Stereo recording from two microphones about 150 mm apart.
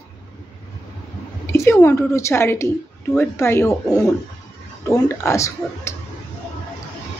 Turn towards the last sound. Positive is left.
turn(degrees=20)  # may be behind; listen again after turning